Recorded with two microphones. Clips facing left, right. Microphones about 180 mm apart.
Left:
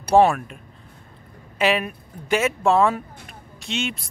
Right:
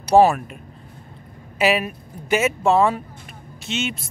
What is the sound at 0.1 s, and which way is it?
Speech, 5° right (ahead or behind).